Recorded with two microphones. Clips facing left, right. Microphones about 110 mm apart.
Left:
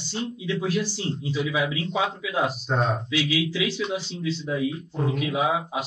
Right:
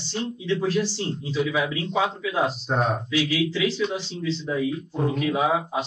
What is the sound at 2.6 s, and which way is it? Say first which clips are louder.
Speech: right 1 dB; 5° right (ahead or behind).